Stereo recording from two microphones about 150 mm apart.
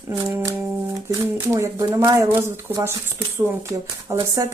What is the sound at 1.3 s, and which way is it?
Speech, 20° right (ahead or behind).